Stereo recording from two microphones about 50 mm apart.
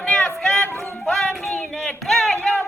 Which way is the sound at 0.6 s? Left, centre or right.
Left.